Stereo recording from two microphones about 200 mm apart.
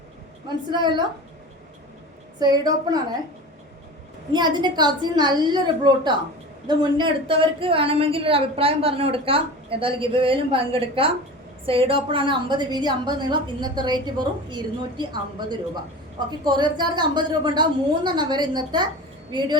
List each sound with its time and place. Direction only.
0.4 s a woman's voice: 20° right (ahead or behind)
2.4 s a woman's voice: 20° right (ahead or behind)
4.3 s a woman's voice: 20° right (ahead or behind)